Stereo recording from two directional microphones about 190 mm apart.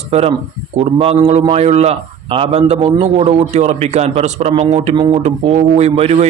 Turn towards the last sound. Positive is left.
turn(degrees=-35)  # may be behind; listen again after turning